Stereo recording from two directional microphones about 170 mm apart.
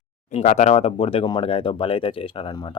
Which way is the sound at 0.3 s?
45° left (ahead or behind).